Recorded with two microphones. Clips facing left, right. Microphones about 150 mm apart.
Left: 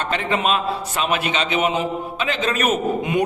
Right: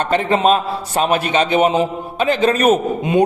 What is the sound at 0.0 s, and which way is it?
A man's voice, 40° right (ahead or behind).